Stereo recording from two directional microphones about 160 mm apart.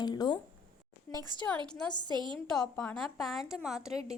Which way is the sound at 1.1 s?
25° right (ahead or behind).